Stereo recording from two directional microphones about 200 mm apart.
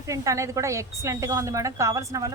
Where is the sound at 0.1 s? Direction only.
15° right (ahead or behind).